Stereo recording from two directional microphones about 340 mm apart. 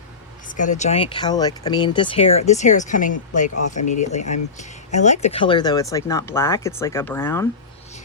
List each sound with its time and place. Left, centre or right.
0.4 s speech: left; by 7.4 s centre